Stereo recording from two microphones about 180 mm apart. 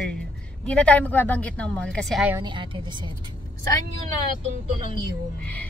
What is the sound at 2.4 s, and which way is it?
Speech, 25° right (ahead or behind).